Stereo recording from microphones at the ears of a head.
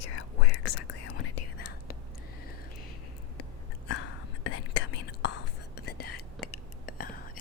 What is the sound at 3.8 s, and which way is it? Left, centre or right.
Whispering, left.